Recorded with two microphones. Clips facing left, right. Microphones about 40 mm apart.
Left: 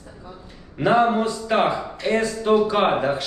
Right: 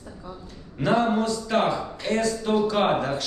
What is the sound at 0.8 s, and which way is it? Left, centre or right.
A man's voice, centre.